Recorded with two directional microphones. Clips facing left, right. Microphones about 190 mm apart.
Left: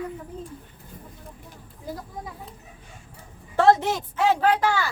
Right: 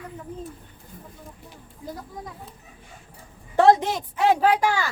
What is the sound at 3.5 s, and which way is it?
A woman's voice, 15° right (ahead or behind).